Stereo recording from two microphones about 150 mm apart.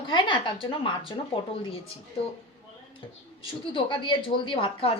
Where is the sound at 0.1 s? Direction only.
35° left (ahead or behind).